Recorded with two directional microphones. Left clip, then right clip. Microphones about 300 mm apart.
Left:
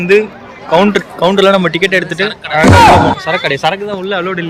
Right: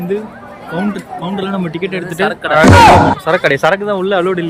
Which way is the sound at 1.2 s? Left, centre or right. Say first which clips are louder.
Left 13 dB; centre.